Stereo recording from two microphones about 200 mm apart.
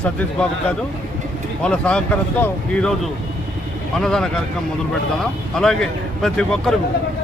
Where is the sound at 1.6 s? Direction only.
5° left (ahead or behind).